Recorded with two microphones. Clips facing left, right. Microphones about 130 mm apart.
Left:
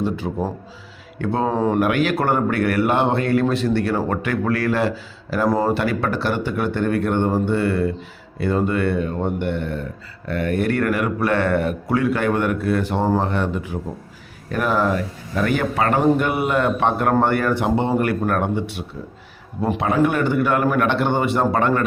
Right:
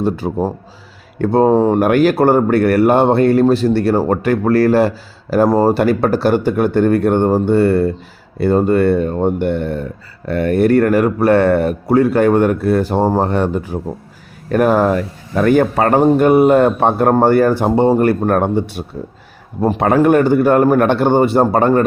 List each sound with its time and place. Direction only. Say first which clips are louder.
0.0 s speech: right 6 dB; 40° right (ahead or behind)